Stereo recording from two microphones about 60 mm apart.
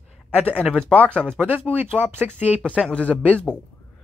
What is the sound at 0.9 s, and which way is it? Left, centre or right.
Speech, left.